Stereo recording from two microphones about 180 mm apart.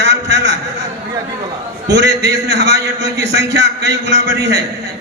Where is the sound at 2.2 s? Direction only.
70° right (ahead or behind).